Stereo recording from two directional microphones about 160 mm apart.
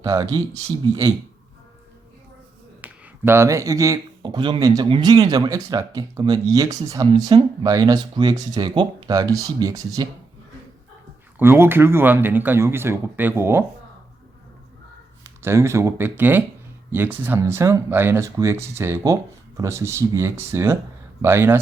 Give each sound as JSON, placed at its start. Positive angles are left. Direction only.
{"t": 0.0, "sound": "speech", "side_deg": -20}
{"t": 2.8, "sound": "speech", "side_deg": -15}
{"t": 11.3, "sound": "speech", "side_deg": -15}
{"t": 15.2, "sound": "speech", "side_deg": -15}